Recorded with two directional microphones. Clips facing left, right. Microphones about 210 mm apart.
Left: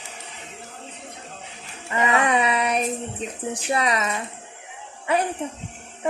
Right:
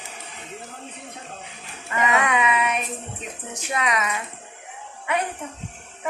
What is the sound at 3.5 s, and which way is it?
Speech, 35° left (ahead or behind).